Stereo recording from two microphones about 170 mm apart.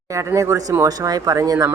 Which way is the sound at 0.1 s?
20° right (ahead or behind).